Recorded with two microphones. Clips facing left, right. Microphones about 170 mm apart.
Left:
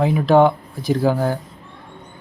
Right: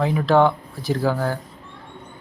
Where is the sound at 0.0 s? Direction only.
15° left (ahead or behind).